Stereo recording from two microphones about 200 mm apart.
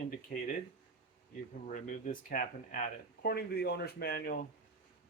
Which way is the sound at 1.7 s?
40° left (ahead or behind).